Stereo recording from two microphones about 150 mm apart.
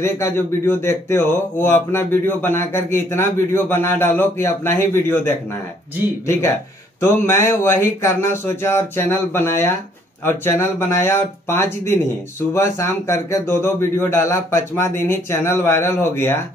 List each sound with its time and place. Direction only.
0.0 s a man's voice: 15° left (ahead or behind)